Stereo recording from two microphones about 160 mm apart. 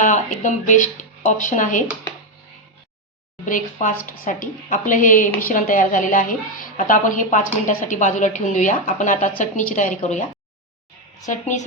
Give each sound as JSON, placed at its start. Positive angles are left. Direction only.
{"t": 0.0, "sound": "speech", "side_deg": 50}
{"t": 3.4, "sound": "a woman's voice", "side_deg": 55}
{"t": 11.3, "sound": "speech", "side_deg": 50}